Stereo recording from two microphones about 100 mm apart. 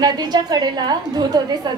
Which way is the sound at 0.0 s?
45° right (ahead or behind).